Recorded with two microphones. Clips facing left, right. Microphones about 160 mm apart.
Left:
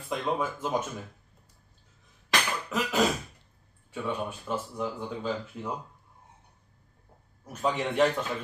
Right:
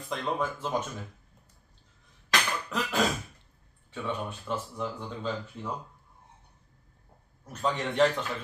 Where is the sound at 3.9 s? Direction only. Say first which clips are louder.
Left 2 dB; 10° left (ahead or behind).